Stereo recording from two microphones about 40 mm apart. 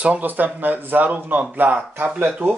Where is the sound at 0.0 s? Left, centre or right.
Right.